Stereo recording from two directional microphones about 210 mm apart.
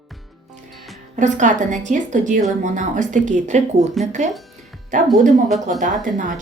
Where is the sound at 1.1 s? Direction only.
35° right (ahead or behind).